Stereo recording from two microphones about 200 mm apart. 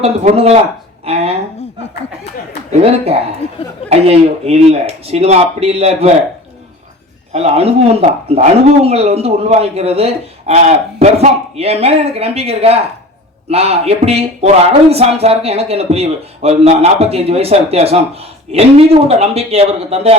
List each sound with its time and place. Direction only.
0.0 s speech: 30° right (ahead or behind)
2.8 s speech: 30° right (ahead or behind)
3.4 s speech: 30° left (ahead or behind)
3.8 s speech: 30° right (ahead or behind)
7.3 s speech: 30° right (ahead or behind)